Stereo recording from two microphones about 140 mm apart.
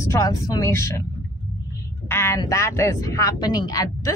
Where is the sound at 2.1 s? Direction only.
20° left (ahead or behind).